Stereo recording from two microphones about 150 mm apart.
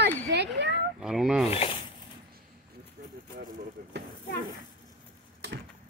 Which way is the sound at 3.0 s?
90° right.